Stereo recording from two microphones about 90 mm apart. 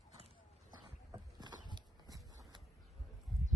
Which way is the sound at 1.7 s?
50° right (ahead or behind).